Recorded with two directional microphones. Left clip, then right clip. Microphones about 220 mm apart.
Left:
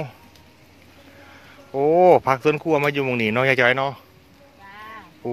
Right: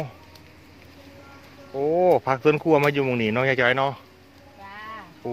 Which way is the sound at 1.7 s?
35° left (ahead or behind).